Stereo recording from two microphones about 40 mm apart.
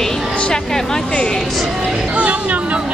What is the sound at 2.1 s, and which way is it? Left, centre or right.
Speech, right.